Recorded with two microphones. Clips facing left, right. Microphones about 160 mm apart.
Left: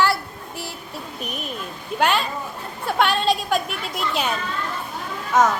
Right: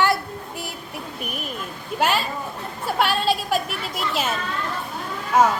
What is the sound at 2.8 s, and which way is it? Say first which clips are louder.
A woman's voice: left 1 dB; 5° right (ahead or behind).